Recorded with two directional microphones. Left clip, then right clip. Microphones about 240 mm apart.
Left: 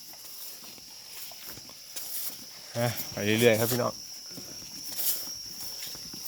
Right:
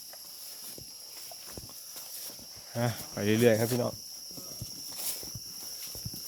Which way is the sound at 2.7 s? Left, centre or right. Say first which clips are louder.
Left 3 dB; centre.